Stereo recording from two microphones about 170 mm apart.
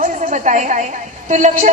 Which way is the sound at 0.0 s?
45° right (ahead or behind).